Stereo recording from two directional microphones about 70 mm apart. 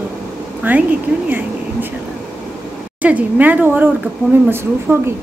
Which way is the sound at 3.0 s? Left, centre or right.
Right.